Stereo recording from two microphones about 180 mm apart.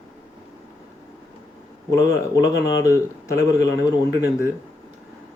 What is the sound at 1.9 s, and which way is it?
Speech, 20° left (ahead or behind).